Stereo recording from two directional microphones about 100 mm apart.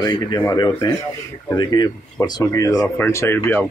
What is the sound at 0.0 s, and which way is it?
Speech, 45° left (ahead or behind).